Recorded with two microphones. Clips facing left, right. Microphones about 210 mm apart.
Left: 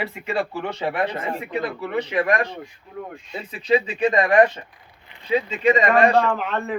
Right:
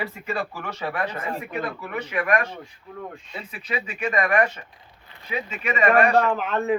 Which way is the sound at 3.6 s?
35° left (ahead or behind).